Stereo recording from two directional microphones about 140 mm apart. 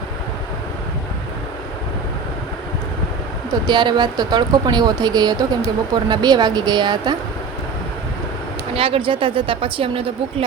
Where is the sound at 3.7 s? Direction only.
30° right (ahead or behind).